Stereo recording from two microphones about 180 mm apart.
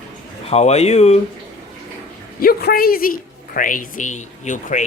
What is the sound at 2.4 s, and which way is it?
A woman's voice, 55° left (ahead or behind).